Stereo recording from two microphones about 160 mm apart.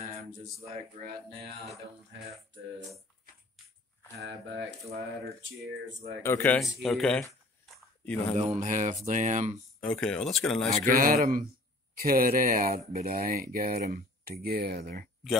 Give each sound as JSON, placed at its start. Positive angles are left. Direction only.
{"t": 0.7, "sound": "speech", "side_deg": -40}
{"t": 4.2, "sound": "speech", "side_deg": -90}
{"t": 6.2, "sound": "speech", "side_deg": 10}
{"t": 7.6, "sound": "a sound", "side_deg": 5}
{"t": 8.4, "sound": "speech", "side_deg": -45}
{"t": 9.8, "sound": "speech", "side_deg": 5}
{"t": 10.7, "sound": "speech", "side_deg": -60}
{"t": 11.9, "sound": "speech", "side_deg": -65}